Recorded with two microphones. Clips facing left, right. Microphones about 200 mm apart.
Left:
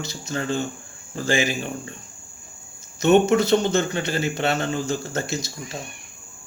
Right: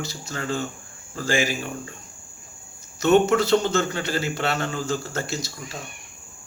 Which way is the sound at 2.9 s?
20° left (ahead or behind).